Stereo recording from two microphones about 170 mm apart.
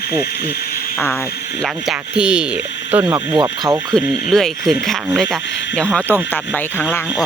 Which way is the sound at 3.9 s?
5° left (ahead or behind).